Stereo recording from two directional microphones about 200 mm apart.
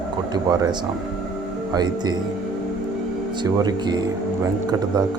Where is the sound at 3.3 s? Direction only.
20° right (ahead or behind).